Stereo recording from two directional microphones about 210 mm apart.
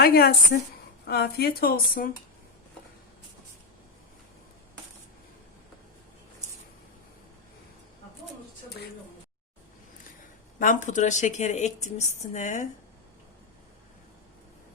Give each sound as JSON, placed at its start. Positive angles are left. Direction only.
{"t": 0.0, "sound": "a woman's voice", "side_deg": 45}
{"t": 10.6, "sound": "a woman's voice", "side_deg": 40}